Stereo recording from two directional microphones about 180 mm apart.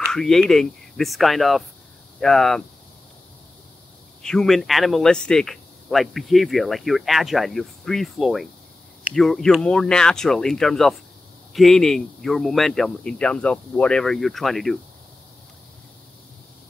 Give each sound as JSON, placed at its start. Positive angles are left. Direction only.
{"t": 0.1, "sound": "speech", "side_deg": 0}
{"t": 4.2, "sound": "speech", "side_deg": 5}